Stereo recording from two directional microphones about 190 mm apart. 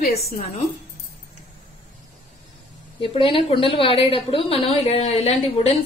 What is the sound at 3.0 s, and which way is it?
A woman's voice, 30° left (ahead or behind).